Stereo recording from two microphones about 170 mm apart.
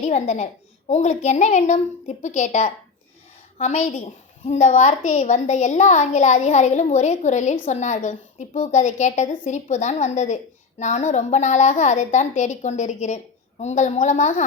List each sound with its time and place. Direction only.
0.0 s a woman's voice: 45° left (ahead or behind)